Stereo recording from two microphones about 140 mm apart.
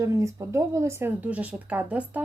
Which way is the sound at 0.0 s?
20° right (ahead or behind).